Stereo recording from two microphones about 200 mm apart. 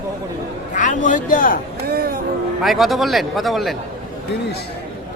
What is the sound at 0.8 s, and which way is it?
Speech, 40° left (ahead or behind).